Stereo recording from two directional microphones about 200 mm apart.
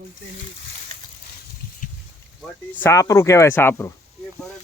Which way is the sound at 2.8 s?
15° left (ahead or behind).